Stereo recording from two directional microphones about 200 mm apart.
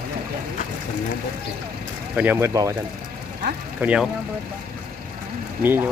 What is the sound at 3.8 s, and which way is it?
Speech, 5° right (ahead or behind).